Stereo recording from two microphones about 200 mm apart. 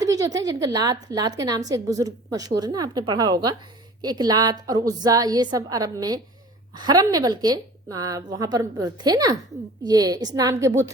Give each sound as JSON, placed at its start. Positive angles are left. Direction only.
{"t": 0.0, "sound": "a woman's voice", "side_deg": -15}